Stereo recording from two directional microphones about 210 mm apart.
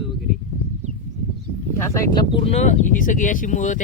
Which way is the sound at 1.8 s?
15° left (ahead or behind).